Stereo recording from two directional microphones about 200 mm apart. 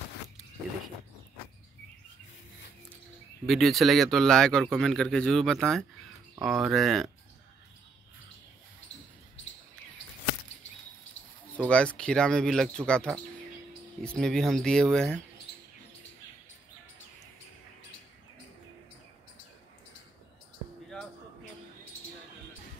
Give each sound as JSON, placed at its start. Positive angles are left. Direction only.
{"t": 3.4, "sound": "speech", "side_deg": 0}
{"t": 11.5, "sound": "speech", "side_deg": 5}
{"t": 15.5, "sound": "rodents", "side_deg": 55}